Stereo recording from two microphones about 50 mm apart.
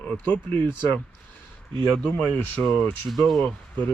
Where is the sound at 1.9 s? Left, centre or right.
Left.